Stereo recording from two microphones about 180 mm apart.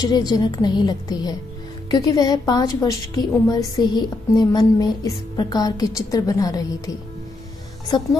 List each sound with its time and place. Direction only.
0.0 s a woman's voice: 20° left (ahead or behind)